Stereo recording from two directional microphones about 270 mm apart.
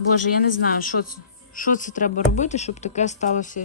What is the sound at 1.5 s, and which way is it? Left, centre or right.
Speech, left.